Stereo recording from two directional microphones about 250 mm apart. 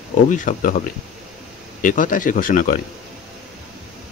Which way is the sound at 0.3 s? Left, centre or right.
Left.